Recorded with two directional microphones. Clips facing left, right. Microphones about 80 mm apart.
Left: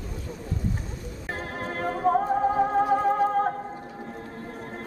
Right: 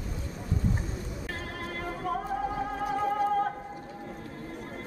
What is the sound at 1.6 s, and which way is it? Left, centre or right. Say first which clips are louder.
Music: left 11 dB; left.